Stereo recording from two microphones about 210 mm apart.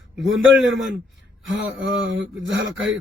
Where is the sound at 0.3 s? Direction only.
60° right (ahead or behind).